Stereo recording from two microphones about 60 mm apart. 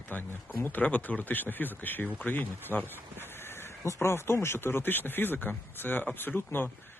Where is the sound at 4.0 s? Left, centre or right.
Left.